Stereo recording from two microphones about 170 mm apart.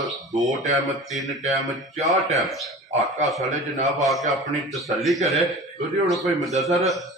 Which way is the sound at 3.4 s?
45° right (ahead or behind).